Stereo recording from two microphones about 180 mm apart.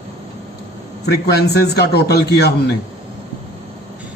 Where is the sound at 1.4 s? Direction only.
65° left (ahead or behind).